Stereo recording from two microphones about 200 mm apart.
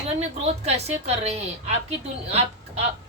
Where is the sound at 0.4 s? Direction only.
30° right (ahead or behind).